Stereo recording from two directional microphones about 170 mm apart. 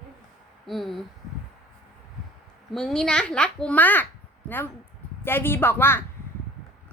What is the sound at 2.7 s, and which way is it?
A woman's voice, centre (ahead or behind).